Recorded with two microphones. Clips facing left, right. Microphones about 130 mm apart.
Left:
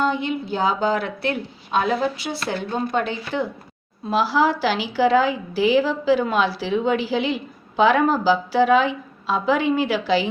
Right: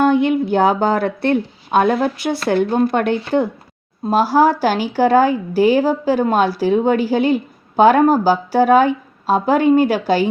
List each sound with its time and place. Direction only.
0.0 s speech: 55° right (ahead or behind); by 1.4 s 40° right (ahead or behind)
1.7 s speech: 55° right (ahead or behind)
4.0 s a woman's voice: 45° right (ahead or behind)